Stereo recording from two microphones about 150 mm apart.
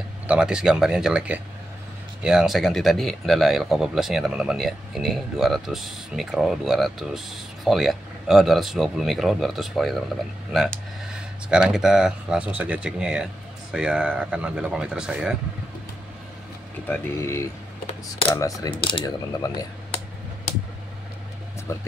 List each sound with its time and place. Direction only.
0.3 s speech: 5° right (ahead or behind)
11.4 s speech: 5° right (ahead or behind)
16.8 s speech: 15° left (ahead or behind)
21.7 s speech: 15° left (ahead or behind)